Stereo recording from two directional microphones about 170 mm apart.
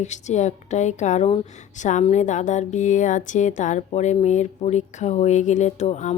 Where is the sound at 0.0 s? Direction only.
45° left (ahead or behind).